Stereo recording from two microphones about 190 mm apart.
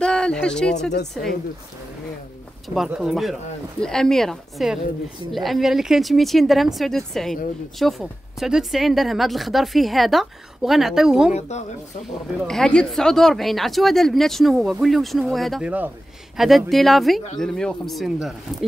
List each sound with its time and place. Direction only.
0.0 s a sound: 5° left (ahead or behind)
2.7 s speech: centre (ahead or behind)
11.3 s a woman's voice: 35° left (ahead or behind)
12.4 s speech: 5° left (ahead or behind)